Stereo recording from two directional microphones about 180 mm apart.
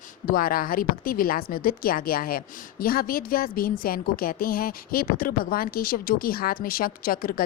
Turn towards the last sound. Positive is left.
turn(degrees=55)  # may be behind; listen again after turning